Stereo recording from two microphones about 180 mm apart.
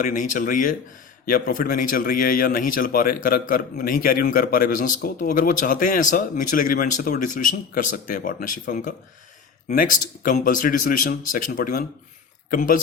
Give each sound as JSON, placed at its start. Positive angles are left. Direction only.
{"t": 0.0, "sound": "a man's voice", "side_deg": 50}